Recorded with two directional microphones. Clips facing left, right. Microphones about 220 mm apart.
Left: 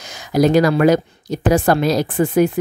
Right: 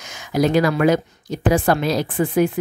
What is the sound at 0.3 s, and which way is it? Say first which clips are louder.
Speech: left 4 dB; 40° left (ahead or behind).